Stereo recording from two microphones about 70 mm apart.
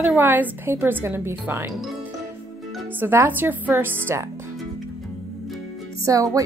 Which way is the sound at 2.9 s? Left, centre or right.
Right.